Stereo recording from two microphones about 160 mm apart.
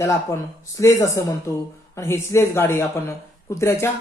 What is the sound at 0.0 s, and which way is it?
Speech, 20° left (ahead or behind).